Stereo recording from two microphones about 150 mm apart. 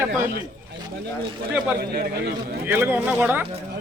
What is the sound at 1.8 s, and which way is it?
Speech, 90° right.